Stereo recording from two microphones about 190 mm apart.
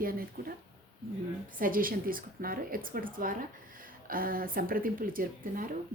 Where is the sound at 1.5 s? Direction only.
45° right (ahead or behind).